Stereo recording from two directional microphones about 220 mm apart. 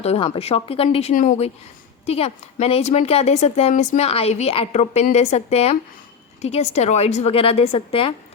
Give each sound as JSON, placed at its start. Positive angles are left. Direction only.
{"t": 0.0, "sound": "a woman's voice", "side_deg": 25}